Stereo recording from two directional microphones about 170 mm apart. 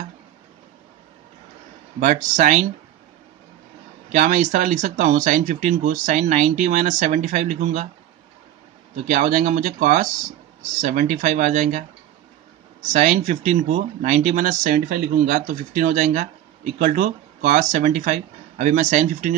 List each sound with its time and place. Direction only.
2.0 s speech: 50° right (ahead or behind)
4.1 s speech: 50° right (ahead or behind)
8.9 s speech: 50° right (ahead or behind)
12.8 s speech: 45° right (ahead or behind)